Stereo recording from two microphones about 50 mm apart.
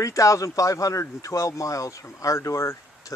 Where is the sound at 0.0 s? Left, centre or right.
Left.